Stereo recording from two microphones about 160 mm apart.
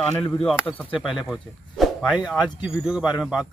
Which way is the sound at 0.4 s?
5° left (ahead or behind).